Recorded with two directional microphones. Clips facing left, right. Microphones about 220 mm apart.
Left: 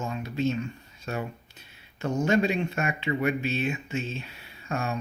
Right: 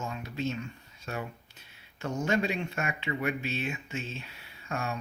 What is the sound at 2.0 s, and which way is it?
Speech, 30° left (ahead or behind).